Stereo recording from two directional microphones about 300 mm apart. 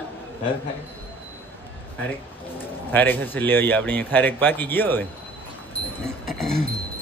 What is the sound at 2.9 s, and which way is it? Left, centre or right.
Speech, centre.